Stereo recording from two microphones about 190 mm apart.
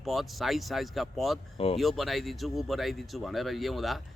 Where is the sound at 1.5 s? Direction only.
30° left (ahead or behind).